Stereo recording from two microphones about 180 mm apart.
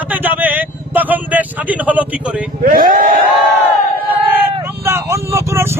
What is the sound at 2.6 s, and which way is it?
Speech, 50° right (ahead or behind).